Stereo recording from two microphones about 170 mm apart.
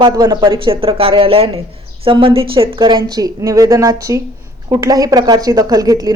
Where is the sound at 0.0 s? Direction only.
25° right (ahead or behind).